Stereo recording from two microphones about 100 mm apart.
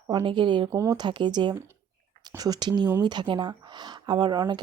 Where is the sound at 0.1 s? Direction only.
50° right (ahead or behind).